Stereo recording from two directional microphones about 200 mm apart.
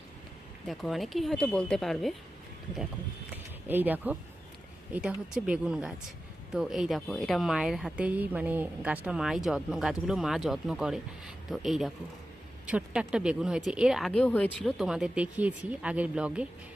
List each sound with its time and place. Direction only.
0.7 s speech: centre (ahead or behind)
3.7 s speech: 10° right (ahead or behind)